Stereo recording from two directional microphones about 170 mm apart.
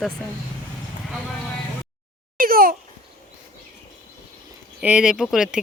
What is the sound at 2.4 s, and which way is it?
Babbling, 60° right (ahead or behind).